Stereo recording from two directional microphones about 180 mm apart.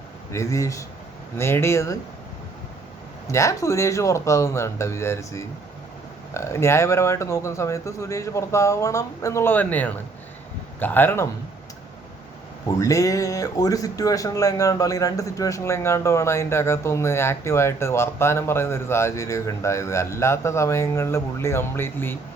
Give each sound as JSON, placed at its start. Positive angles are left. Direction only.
{"t": 0.3, "sound": "speech", "side_deg": 15}
{"t": 3.2, "sound": "speech", "side_deg": 15}
{"t": 12.6, "sound": "speech", "side_deg": 20}